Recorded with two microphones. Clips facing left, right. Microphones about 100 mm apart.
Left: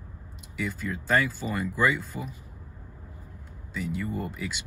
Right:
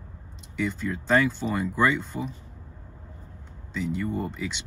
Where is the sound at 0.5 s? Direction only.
5° left (ahead or behind).